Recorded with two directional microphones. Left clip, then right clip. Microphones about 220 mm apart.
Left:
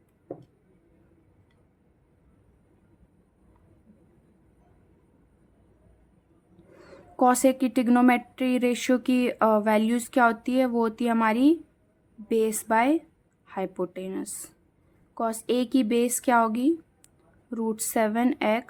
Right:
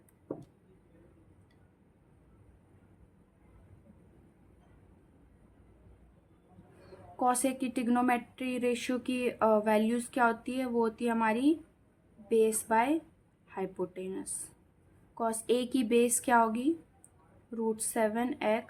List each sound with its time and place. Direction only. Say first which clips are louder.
7.2 s a woman's voice: left 9 dB; 35° left (ahead or behind)